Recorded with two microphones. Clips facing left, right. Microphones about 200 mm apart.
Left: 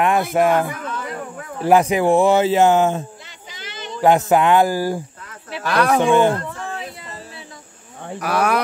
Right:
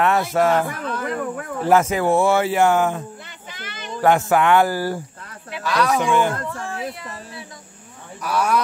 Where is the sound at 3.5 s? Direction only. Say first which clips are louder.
Left 1 dB; 55° right (ahead or behind).